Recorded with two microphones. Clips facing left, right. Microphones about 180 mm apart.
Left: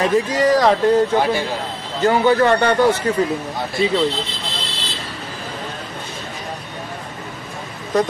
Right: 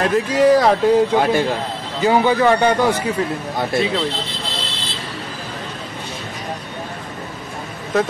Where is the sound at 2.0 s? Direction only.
15° right (ahead or behind).